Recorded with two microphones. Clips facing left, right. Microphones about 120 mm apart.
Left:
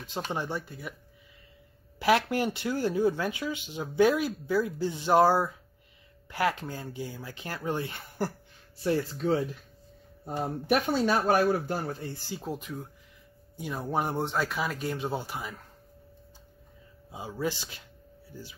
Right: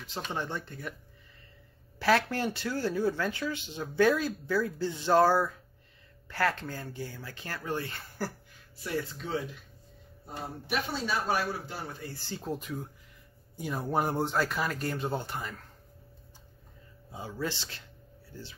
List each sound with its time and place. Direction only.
0.3 s speech: 10° left (ahead or behind)
2.0 s speech: 15° left (ahead or behind)
8.8 s speech: 35° left (ahead or behind)
10.2 s speech: 50° left (ahead or behind)
12.3 s speech: 5° left (ahead or behind)
17.1 s speech: 15° left (ahead or behind)